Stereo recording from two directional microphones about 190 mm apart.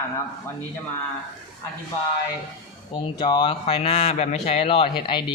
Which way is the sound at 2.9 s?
25° left (ahead or behind).